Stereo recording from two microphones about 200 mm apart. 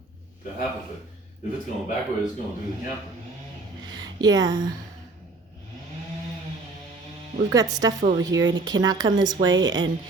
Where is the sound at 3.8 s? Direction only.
20° right (ahead or behind).